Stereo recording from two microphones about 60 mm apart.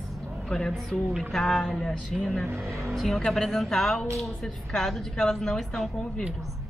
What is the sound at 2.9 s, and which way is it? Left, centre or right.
Speech, centre.